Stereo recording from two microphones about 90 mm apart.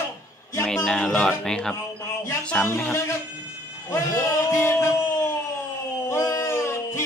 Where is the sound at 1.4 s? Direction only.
5° left (ahead or behind).